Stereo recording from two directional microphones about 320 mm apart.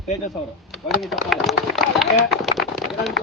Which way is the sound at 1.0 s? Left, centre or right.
Centre.